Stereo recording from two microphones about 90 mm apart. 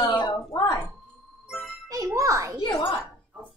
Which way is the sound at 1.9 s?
35° right (ahead or behind).